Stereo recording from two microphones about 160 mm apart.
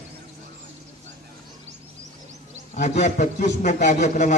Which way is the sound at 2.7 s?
50° left (ahead or behind).